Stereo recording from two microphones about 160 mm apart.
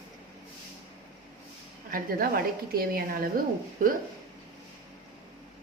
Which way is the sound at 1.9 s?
65° right (ahead or behind).